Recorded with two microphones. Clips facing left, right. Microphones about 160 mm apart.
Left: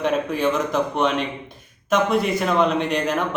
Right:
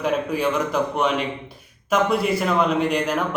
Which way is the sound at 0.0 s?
10° right (ahead or behind).